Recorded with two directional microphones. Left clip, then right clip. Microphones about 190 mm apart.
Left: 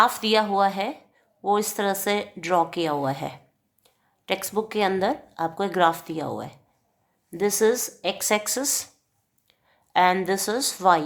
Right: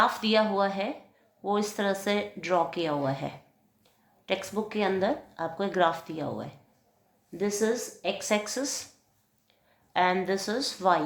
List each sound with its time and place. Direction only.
0.0 s speech: 35° left (ahead or behind)
9.9 s speech: 35° left (ahead or behind)